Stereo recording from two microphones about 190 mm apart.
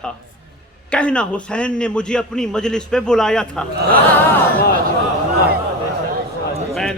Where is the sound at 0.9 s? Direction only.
5° left (ahead or behind).